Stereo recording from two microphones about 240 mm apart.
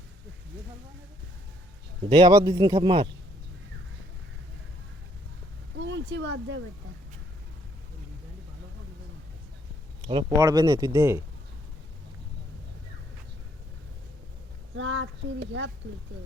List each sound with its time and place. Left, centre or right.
2.0 s speech: centre
5.8 s speech: right
10.1 s speech: centre
14.8 s speech: right